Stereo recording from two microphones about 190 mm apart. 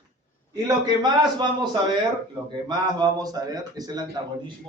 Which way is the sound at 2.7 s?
20° right (ahead or behind).